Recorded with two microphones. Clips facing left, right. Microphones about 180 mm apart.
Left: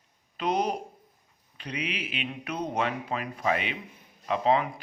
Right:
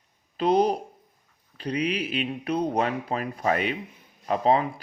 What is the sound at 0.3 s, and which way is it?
Speech, 35° right (ahead or behind).